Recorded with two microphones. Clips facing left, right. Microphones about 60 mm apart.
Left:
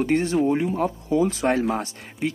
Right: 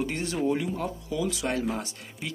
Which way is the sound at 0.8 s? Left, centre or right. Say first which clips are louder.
Left 8 dB; left.